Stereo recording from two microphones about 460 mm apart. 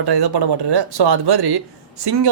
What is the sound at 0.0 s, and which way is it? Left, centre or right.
Speech, right.